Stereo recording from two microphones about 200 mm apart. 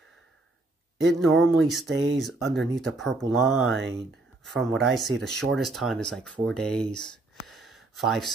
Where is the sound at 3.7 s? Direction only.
60° right (ahead or behind).